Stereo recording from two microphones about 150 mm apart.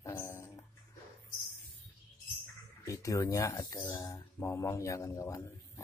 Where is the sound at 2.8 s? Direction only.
20° left (ahead or behind).